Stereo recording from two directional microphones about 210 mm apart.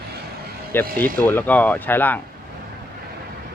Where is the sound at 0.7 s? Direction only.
10° left (ahead or behind).